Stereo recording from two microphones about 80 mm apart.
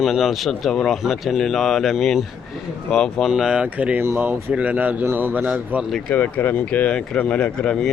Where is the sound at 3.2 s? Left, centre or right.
Centre.